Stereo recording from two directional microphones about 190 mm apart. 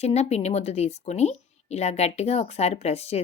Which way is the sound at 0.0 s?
35° left (ahead or behind).